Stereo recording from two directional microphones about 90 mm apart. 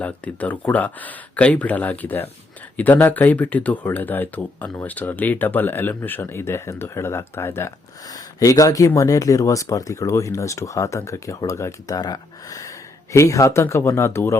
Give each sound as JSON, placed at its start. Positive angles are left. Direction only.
{"t": 0.0, "sound": "speech", "side_deg": 15}
{"t": 8.0, "sound": "speech", "side_deg": 40}
{"t": 11.9, "sound": "speech", "side_deg": 50}